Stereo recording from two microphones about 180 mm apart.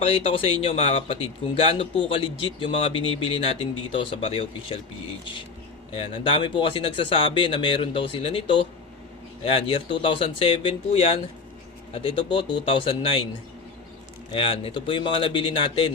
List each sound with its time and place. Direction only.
0.0 s speech: 35° left (ahead or behind)
5.9 s speech: 30° left (ahead or behind)
14.3 s speech: 30° left (ahead or behind)